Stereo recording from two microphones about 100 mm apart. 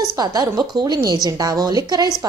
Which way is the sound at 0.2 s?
40° right (ahead or behind).